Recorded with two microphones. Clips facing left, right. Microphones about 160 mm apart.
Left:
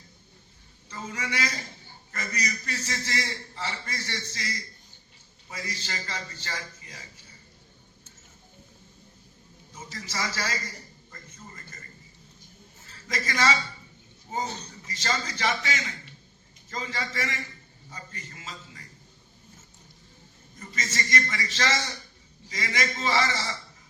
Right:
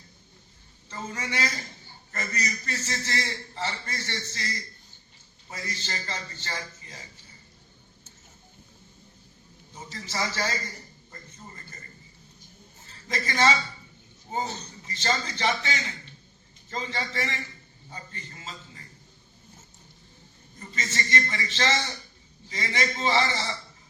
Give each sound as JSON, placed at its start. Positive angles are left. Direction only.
{"t": 1.2, "sound": "a man's voice", "side_deg": -30}
{"t": 5.5, "sound": "a man's voice", "side_deg": -30}
{"t": 9.7, "sound": "a man's voice", "side_deg": -30}
{"t": 11.1, "sound": "a sound", "side_deg": -30}
{"t": 13.1, "sound": "a man's voice", "side_deg": -30}
{"t": 17.9, "sound": "a sound", "side_deg": -30}
{"t": 20.6, "sound": "a man's voice", "side_deg": -30}